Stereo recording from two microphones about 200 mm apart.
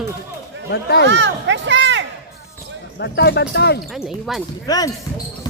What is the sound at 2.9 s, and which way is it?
Speech, 55° left (ahead or behind).